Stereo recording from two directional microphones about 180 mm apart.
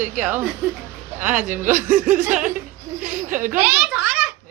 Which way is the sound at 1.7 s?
50° right (ahead or behind).